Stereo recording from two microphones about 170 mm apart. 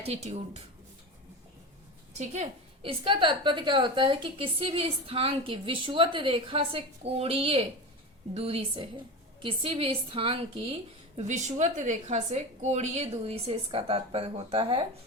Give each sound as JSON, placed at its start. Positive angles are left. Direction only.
{"t": 0.0, "sound": "a woman's voice", "side_deg": -40}
{"t": 2.1, "sound": "a woman's voice", "side_deg": -40}
{"t": 11.2, "sound": "a woman's voice", "side_deg": -45}